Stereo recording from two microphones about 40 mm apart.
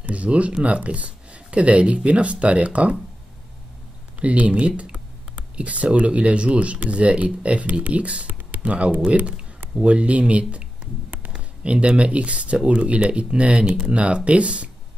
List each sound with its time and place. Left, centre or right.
0.0 s speech: right
4.2 s speech: right
4.9 s clicking: right
5.9 s speech: right